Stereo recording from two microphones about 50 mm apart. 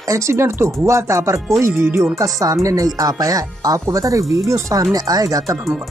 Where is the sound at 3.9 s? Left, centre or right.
Right.